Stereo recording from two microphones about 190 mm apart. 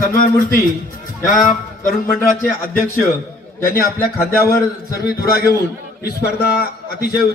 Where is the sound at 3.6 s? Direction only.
50° left (ahead or behind).